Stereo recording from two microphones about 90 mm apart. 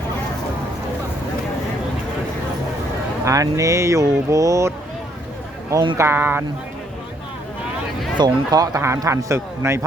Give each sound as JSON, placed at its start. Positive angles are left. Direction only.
{"t": 3.2, "sound": "speech", "side_deg": -40}
{"t": 6.0, "sound": "speech", "side_deg": -25}
{"t": 8.2, "sound": "speech", "side_deg": -45}